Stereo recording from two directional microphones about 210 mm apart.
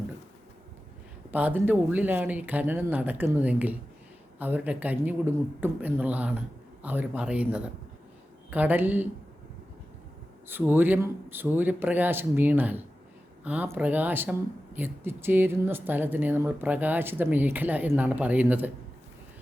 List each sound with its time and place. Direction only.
1.3 s speech: 10° right (ahead or behind)
10.5 s speech: 10° right (ahead or behind)